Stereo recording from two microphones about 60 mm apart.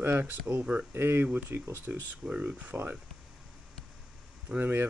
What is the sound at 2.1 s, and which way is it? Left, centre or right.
Speech, right.